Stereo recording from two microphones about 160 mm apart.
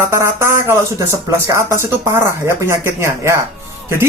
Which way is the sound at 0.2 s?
15° right (ahead or behind).